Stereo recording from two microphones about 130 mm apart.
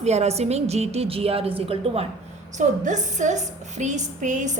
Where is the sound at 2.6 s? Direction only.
70° right (ahead or behind).